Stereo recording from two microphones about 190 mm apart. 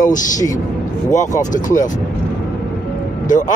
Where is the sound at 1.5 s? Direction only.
40° left (ahead or behind).